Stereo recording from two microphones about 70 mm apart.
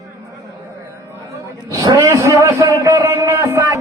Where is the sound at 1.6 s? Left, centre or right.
Right.